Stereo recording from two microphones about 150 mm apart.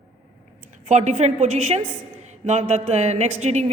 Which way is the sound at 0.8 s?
50° right (ahead or behind).